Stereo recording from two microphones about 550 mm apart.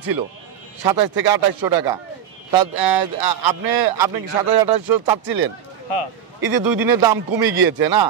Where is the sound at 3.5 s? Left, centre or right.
Right.